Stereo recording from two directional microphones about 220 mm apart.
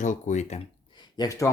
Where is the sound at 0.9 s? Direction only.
15° left (ahead or behind).